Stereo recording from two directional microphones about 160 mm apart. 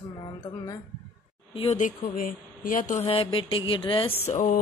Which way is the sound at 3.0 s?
35° left (ahead or behind).